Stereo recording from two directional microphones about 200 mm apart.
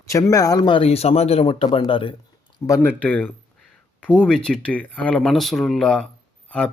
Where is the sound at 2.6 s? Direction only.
15° left (ahead or behind).